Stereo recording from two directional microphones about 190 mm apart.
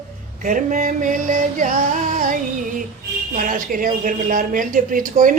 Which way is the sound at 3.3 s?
45° right (ahead or behind).